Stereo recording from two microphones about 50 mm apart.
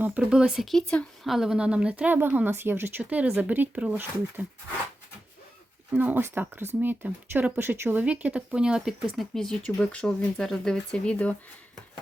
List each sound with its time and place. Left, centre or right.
0.2 s speech: centre
0.6 s speech: centre
1.2 s speech: centre
1.5 s speech: right
2.1 s speech: right
2.5 s speech: right
3.0 s speech: right
5.9 s speech: right
8.0 s speech: right; by 9.2 s centre
9.3 s speech: centre
10.3 s speech: centre; by 11.3 s left